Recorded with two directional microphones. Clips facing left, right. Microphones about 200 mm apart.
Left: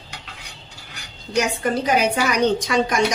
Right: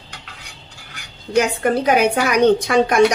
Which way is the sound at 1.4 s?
55° right (ahead or behind).